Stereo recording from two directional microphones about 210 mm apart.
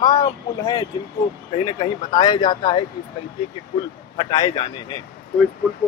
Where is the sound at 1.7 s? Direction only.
20° left (ahead or behind).